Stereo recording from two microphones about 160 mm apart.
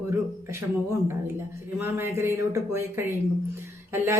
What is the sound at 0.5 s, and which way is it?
Speech, 15° right (ahead or behind).